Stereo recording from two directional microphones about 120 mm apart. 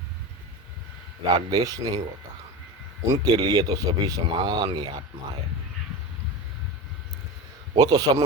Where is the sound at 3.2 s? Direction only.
35° right (ahead or behind).